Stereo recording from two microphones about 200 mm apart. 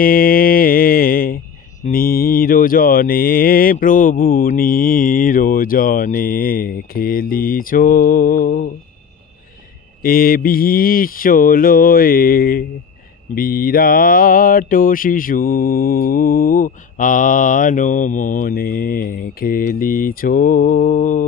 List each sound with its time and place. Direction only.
0.0 s mantra: 45° left (ahead or behind)
10.0 s mantra: 45° left (ahead or behind)